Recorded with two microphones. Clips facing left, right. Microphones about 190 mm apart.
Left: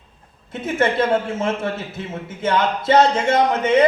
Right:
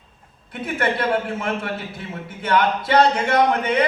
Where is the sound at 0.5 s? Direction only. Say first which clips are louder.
Left 4 dB; 25° left (ahead or behind).